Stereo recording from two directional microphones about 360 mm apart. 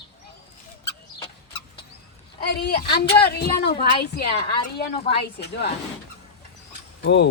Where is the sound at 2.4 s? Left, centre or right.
Left.